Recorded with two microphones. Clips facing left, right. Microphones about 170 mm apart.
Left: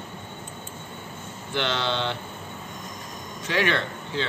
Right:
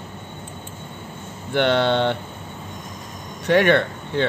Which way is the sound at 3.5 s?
55° right (ahead or behind).